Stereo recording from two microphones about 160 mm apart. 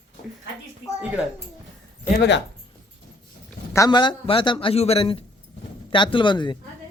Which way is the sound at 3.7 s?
25° left (ahead or behind).